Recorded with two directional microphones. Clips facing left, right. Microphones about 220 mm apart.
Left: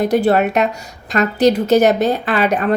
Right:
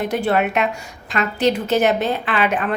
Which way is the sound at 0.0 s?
40° left (ahead or behind).